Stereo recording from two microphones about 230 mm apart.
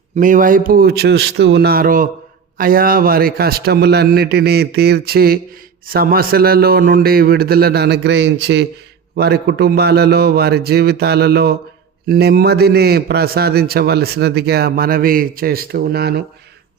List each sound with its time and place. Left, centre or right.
0.2 s a man's voice: right